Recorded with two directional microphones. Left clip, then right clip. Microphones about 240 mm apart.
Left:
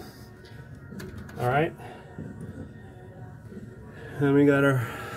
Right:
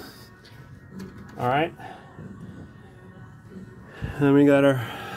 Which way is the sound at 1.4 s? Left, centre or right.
Right.